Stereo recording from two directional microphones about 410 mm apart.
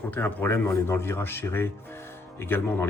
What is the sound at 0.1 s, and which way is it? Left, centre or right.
Speech, centre.